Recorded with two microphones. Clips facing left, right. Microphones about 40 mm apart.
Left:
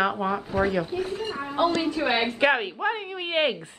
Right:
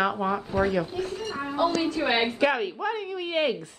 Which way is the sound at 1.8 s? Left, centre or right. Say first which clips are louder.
Even; centre.